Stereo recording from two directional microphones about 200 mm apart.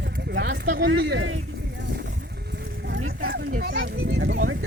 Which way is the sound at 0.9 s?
60° right (ahead or behind).